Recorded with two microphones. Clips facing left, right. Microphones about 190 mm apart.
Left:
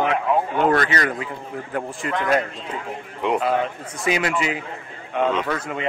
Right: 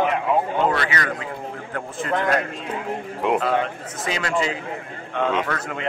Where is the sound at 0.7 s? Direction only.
40° left (ahead or behind).